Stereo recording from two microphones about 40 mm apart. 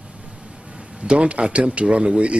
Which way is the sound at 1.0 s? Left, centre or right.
Right.